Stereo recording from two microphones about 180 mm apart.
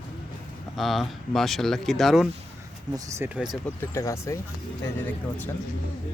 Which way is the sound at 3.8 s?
15° left (ahead or behind).